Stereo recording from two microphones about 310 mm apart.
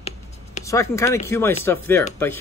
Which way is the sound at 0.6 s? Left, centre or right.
Centre.